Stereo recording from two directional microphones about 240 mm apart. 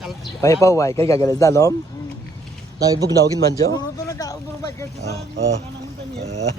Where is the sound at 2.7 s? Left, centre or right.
Centre.